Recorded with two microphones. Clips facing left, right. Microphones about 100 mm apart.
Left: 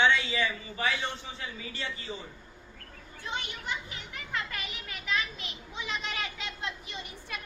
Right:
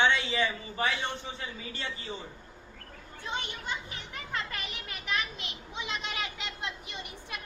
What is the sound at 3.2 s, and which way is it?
A child's voice, 25° right (ahead or behind).